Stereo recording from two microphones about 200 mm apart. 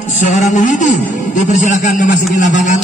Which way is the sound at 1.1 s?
40° left (ahead or behind).